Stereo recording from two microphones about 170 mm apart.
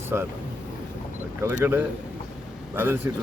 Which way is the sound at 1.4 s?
15° right (ahead or behind).